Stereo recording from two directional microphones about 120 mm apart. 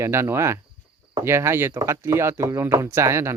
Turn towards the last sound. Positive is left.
turn(degrees=-20)  # may be behind; listen again after turning